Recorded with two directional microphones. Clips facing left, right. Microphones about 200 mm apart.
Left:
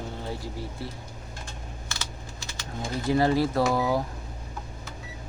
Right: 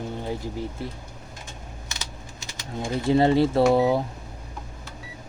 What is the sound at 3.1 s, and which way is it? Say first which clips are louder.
Speech: right 4 dB; 25° right (ahead or behind).